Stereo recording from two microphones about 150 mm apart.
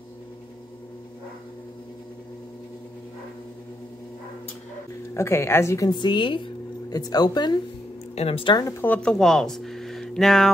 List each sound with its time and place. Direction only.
5.1 s a woman's voice: 20° left (ahead or behind)
8.2 s a woman's voice: 40° left (ahead or behind)
8.8 s speech: 5° left (ahead or behind)